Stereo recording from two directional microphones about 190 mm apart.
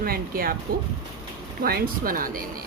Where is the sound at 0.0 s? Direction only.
50° right (ahead or behind).